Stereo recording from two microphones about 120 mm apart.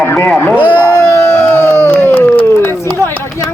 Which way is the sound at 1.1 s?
20° left (ahead or behind).